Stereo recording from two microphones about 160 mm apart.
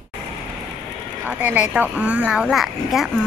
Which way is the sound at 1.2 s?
10° right (ahead or behind).